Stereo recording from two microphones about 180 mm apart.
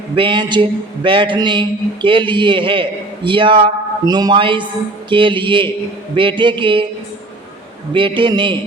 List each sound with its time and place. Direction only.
0.2 s a man's voice: 25° right (ahead or behind)
7.9 s a man's voice: 30° right (ahead or behind)